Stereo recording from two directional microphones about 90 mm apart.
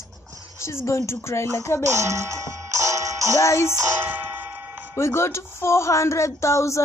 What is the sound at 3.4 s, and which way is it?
Speech, 35° left (ahead or behind).